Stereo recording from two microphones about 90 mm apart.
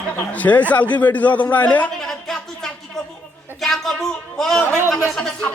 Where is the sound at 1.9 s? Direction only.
5° left (ahead or behind).